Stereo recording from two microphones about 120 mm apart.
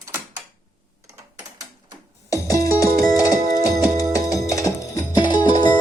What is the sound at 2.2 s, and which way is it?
Music, 25° left (ahead or behind).